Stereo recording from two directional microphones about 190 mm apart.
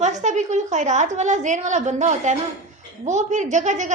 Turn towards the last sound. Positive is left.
turn(degrees=-40)  # may be behind; listen again after turning